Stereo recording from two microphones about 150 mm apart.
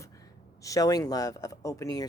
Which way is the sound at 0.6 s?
25° left (ahead or behind).